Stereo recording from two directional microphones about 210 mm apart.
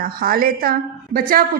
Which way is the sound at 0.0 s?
45° right (ahead or behind).